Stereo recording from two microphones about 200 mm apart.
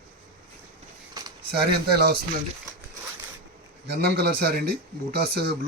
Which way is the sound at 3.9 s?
55° right (ahead or behind).